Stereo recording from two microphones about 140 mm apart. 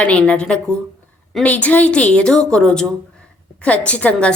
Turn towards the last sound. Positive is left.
turn(degrees=10)  # may be behind; listen again after turning